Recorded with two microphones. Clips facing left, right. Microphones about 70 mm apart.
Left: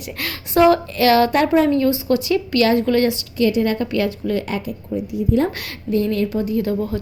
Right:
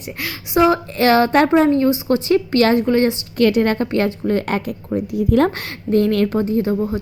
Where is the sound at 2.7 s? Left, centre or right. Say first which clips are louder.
Right 1 dB; right.